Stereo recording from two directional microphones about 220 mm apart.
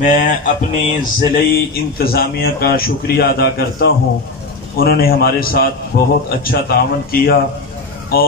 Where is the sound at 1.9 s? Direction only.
45° left (ahead or behind).